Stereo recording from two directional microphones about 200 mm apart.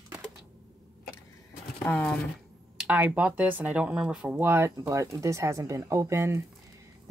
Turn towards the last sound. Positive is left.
turn(degrees=-15)  # may be behind; listen again after turning